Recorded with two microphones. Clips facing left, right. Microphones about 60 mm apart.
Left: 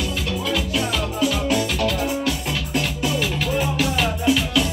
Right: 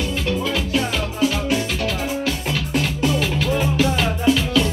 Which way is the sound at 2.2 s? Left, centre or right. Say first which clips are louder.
Right 1 dB; centre.